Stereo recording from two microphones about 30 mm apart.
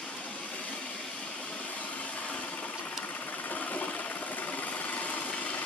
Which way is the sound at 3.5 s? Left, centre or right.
Left.